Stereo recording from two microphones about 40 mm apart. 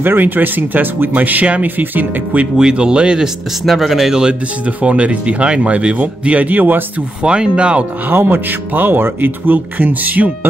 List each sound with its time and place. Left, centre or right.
0.0 s speech: right
1.1 s speech: right
2.5 s speech: right
3.6 s speech: centre
4.6 s speech: right
7.2 s speech: right
8.1 s speech: right